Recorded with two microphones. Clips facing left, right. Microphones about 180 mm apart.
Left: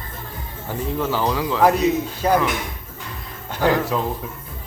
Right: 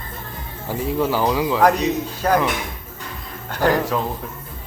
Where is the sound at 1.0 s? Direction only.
10° right (ahead or behind).